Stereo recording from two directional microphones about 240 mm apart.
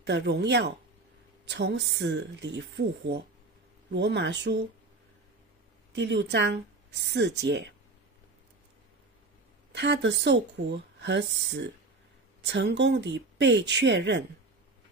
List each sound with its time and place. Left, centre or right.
0.0 s speech: right
3.9 s speech: right
5.9 s speech: right
9.7 s speech: right